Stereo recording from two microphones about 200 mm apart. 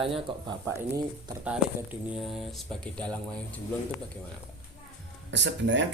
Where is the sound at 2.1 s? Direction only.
Centre (ahead or behind).